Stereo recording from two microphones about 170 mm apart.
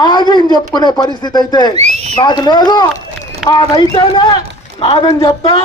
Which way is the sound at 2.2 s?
25° left (ahead or behind).